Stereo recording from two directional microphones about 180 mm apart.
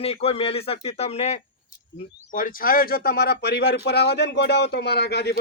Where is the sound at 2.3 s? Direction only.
50° left (ahead or behind).